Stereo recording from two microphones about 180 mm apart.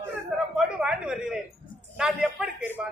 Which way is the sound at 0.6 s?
5° right (ahead or behind).